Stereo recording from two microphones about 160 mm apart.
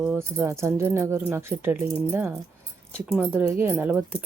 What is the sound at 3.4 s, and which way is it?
Speech, 15° right (ahead or behind).